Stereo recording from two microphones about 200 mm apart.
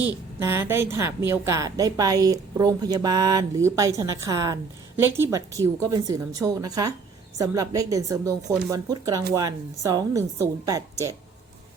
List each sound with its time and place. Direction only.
0.0 s a woman's voice: 15° right (ahead or behind)